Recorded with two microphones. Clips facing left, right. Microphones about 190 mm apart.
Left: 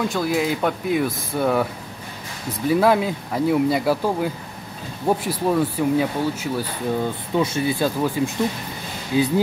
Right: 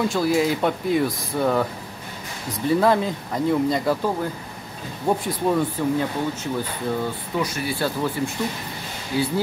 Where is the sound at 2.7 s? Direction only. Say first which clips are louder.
Left 1 dB; 5° left (ahead or behind).